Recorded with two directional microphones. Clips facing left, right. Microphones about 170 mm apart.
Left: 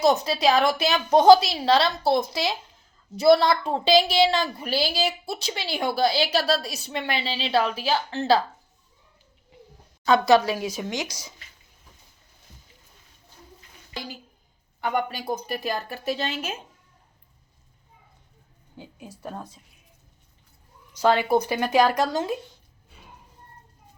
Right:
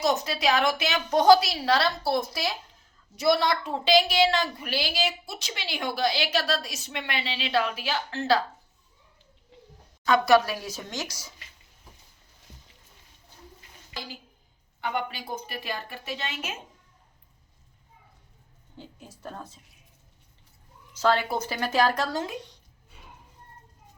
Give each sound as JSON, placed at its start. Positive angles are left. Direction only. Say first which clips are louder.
{"t": 0.0, "sound": "a woman's voice", "louder": "left 5 dB", "side_deg": 30}
{"t": 10.1, "sound": "speech", "louder": "left 2 dB", "side_deg": 20}
{"t": 14.8, "sound": "a woman's voice", "louder": "left 4 dB", "side_deg": 45}
{"t": 18.8, "sound": "speech", "louder": "left 3 dB", "side_deg": 10}
{"t": 20.9, "sound": "speech", "louder": "left 4 dB", "side_deg": 15}